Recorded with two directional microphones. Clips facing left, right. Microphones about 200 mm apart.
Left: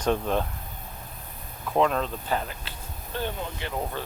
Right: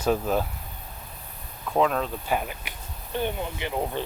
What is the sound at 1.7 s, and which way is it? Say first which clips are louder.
Speech: even; centre (ahead or behind).